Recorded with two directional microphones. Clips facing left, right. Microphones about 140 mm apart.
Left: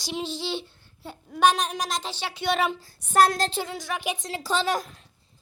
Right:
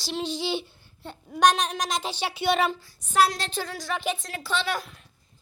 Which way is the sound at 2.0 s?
15° right (ahead or behind).